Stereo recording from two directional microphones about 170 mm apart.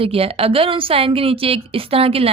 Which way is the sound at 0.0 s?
35° right (ahead or behind).